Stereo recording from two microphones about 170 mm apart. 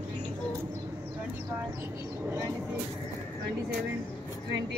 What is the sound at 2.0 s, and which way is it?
Vehicle, 15° right (ahead or behind).